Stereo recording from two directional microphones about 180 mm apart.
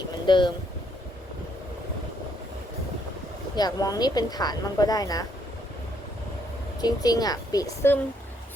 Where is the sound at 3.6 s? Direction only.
20° left (ahead or behind).